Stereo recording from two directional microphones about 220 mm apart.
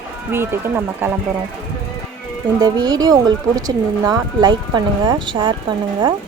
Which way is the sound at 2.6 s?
20° right (ahead or behind).